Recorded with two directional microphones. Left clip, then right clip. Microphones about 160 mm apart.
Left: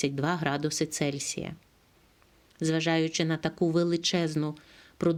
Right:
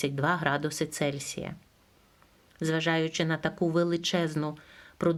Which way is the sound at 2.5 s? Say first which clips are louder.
Left 1 dB; 30° left (ahead or behind).